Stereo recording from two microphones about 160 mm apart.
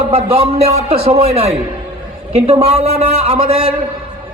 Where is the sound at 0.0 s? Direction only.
35° right (ahead or behind).